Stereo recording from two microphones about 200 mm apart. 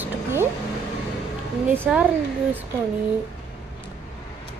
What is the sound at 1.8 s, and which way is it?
Speech, 5° right (ahead or behind).